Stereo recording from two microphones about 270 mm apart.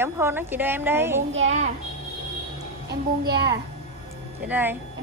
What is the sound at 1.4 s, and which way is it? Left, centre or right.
Speech, right.